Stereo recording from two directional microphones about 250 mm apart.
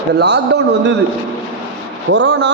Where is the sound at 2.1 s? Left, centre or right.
Right.